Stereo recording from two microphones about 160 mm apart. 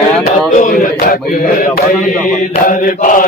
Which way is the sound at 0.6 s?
65° left (ahead or behind).